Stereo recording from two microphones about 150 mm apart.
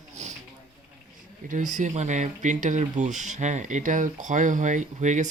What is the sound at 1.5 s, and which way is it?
Speech, 55° right (ahead or behind).